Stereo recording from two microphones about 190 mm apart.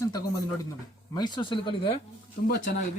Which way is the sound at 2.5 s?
60° left (ahead or behind).